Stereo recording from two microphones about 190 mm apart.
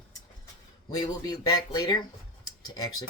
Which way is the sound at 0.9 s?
20° left (ahead or behind).